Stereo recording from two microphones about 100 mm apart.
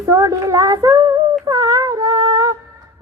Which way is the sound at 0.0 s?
35° right (ahead or behind).